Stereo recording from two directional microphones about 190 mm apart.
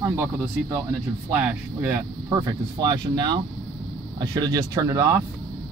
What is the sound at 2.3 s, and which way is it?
Speech, 20° right (ahead or behind).